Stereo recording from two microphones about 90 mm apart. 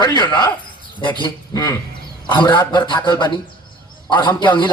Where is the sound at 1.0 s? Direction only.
65° left (ahead or behind).